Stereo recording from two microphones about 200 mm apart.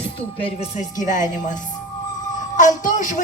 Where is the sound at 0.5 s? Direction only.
35° left (ahead or behind).